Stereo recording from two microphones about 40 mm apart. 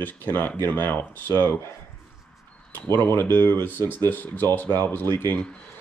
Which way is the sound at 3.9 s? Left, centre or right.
Left.